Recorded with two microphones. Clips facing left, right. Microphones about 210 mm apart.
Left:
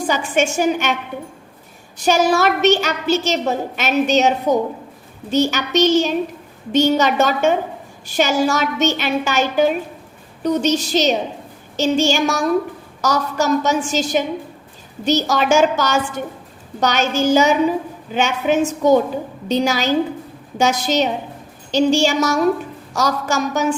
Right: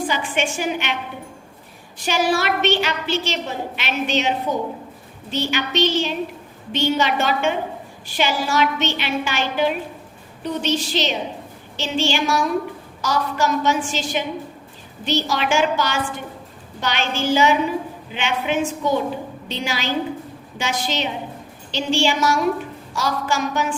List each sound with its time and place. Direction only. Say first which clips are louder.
0.1 s a woman's voice: left 5 dB; 45° left (ahead or behind)
2.0 s a woman's voice: left 5 dB; 45° left (ahead or behind)